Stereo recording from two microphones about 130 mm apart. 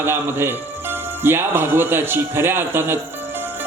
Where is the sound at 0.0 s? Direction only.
15° right (ahead or behind).